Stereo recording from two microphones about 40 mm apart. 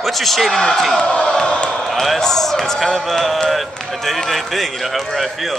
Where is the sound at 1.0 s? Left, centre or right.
Left.